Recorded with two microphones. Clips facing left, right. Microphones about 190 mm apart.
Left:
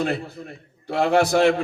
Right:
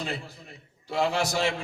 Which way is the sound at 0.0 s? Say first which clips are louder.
Left 10 dB; 60° left (ahead or behind).